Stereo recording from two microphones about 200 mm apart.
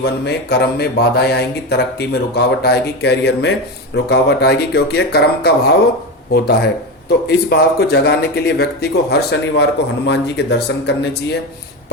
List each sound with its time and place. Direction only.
0.0 s speech: 55° left (ahead or behind)